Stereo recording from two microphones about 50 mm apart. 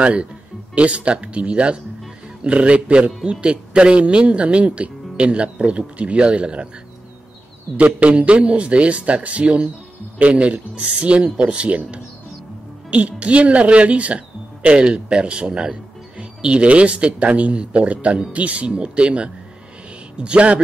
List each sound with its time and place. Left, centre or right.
0.0 s speech: right
7.7 s speech: right